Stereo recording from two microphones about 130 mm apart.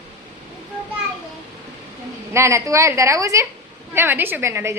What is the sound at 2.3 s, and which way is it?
A woman's voice, 20° right (ahead or behind).